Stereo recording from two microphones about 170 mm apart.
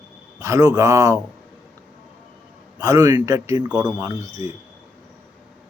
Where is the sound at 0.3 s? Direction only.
20° right (ahead or behind).